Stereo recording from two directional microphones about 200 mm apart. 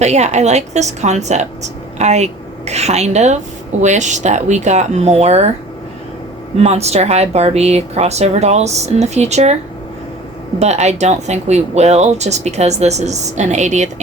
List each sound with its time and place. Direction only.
0.0 s a woman's voice: 35° right (ahead or behind)
6.6 s a woman's voice: 30° right (ahead or behind)
10.6 s a woman's voice: 35° right (ahead or behind)